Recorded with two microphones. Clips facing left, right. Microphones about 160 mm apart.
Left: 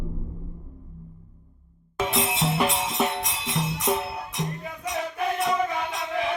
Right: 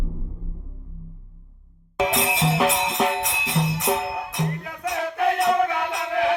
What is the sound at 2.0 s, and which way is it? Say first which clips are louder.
Music: right 3 dB; 80° right.